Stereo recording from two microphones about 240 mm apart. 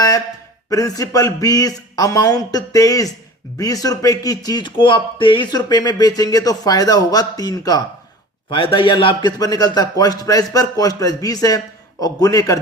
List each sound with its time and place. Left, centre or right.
0.7 s speech: centre